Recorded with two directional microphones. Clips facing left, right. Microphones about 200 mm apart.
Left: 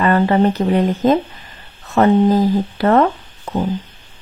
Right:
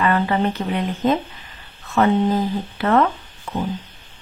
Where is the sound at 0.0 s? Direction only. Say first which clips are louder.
Left 5 dB; 40° left (ahead or behind).